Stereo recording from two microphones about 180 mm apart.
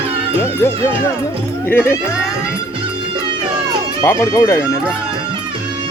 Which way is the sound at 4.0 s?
15° left (ahead or behind).